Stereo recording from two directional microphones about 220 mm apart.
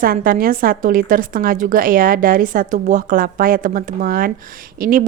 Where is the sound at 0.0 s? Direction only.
40° right (ahead or behind).